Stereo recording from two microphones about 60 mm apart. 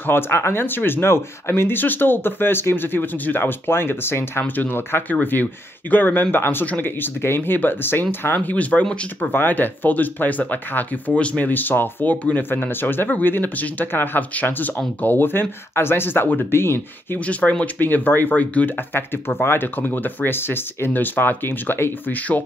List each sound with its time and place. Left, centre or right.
0.0 s speech: left
8.5 s speech: left
17.3 s speech: left
18.9 s speech: left
22.3 s speech: left